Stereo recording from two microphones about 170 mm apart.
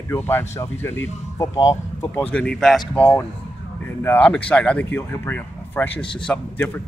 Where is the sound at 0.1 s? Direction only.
15° left (ahead or behind).